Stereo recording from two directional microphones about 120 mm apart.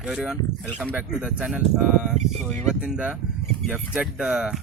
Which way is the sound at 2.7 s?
5° right (ahead or behind).